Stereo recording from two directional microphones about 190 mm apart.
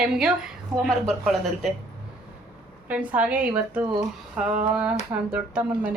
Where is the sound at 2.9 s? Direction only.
10° right (ahead or behind).